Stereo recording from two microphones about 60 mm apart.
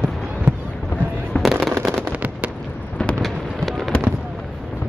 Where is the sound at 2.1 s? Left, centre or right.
Right.